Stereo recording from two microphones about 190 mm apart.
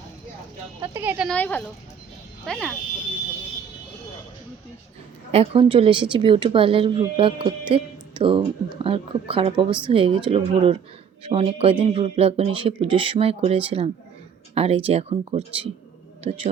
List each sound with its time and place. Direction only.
0.8 s speech: 10° right (ahead or behind)
1.3 s speech: 10° left (ahead or behind)
5.3 s speech: 30° right (ahead or behind)